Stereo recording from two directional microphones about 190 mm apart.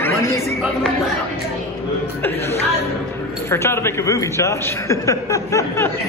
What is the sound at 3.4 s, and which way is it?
A man's voice, 15° left (ahead or behind).